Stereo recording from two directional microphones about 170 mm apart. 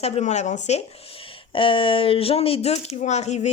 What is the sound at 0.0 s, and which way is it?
Speech, 40° left (ahead or behind).